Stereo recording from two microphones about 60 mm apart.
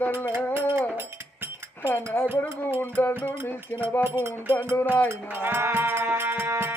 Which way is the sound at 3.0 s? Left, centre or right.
Left.